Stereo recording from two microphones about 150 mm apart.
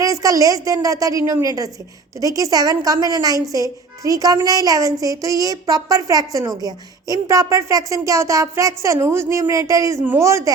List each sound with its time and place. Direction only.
0.0 s a woman's voice: 20° right (ahead or behind)